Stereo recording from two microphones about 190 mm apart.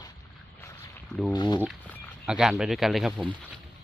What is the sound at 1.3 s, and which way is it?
Speech, 20° left (ahead or behind).